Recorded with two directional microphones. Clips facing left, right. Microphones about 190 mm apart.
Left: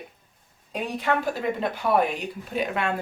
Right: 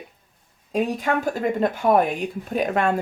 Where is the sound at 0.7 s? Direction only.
45° right (ahead or behind).